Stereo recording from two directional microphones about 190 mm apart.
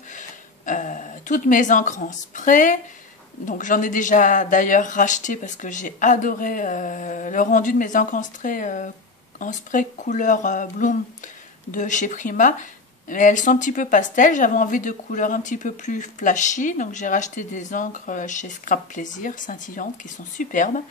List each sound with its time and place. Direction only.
0.1 s speech: 45° left (ahead or behind)